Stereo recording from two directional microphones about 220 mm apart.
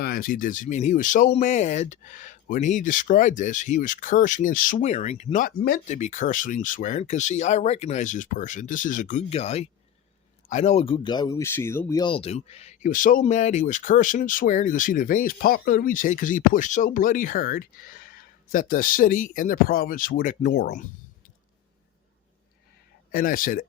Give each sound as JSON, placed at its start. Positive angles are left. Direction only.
{"t": 0.0, "sound": "speech", "side_deg": 40}
{"t": 23.1, "sound": "speech", "side_deg": 40}